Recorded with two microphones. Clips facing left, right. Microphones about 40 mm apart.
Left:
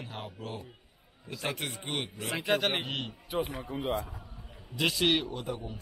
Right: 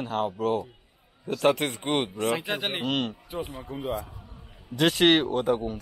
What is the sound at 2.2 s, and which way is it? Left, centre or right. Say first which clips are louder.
Speech: right 2 dB; centre.